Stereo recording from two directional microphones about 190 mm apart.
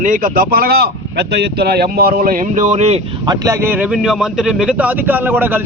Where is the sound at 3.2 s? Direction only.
20° right (ahead or behind).